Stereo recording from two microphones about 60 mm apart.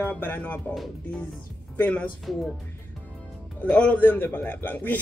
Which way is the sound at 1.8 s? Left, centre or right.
Left.